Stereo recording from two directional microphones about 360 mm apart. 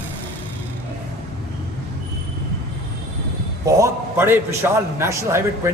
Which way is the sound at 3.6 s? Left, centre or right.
Centre.